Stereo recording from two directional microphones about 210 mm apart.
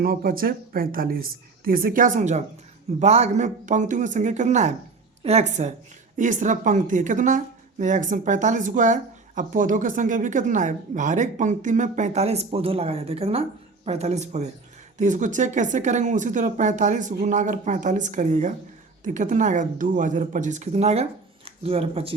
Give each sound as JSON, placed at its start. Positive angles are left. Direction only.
{"t": 0.0, "sound": "a woman's voice", "side_deg": -45}